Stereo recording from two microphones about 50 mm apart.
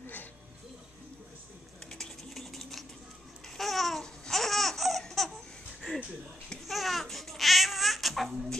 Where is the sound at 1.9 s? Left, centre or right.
Centre.